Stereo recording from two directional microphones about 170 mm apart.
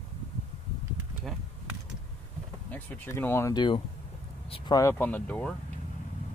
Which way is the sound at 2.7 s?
10° left (ahead or behind).